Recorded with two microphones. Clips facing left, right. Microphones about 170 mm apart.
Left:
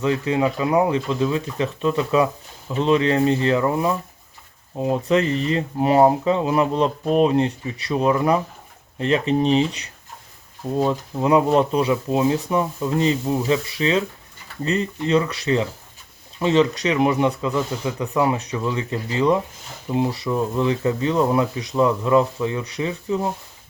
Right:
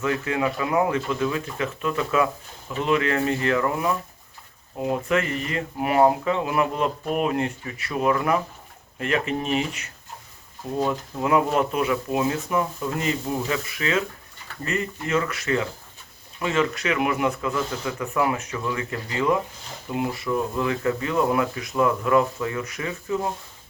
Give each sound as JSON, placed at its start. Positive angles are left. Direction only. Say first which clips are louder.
{"t": 0.0, "sound": "speech", "louder": "left 4 dB", "side_deg": 20}
{"t": 10.8, "sound": "speech", "louder": "left 4 dB", "side_deg": 20}
{"t": 17.2, "sound": "speech", "louder": "left 3 dB", "side_deg": 15}